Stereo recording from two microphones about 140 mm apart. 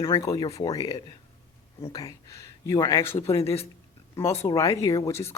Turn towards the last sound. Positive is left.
turn(degrees=20)  # may be behind; listen again after turning